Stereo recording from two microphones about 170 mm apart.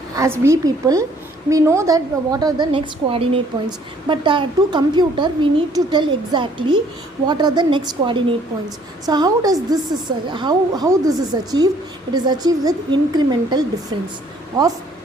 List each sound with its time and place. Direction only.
0.2 s a woman's voice: 15° right (ahead or behind)